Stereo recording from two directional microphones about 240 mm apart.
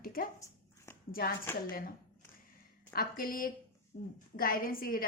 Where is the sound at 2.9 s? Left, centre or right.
Left.